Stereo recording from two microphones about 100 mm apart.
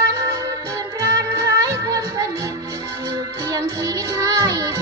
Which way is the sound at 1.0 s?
35° right (ahead or behind).